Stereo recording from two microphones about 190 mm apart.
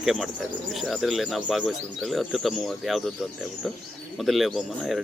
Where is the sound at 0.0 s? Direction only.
Centre (ahead or behind).